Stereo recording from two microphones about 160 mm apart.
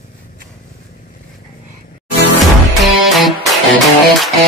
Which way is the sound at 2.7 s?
Centre (ahead or behind).